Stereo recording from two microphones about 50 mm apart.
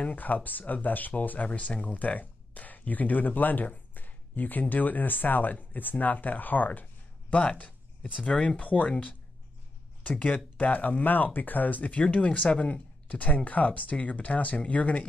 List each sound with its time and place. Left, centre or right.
0.0 s speech: left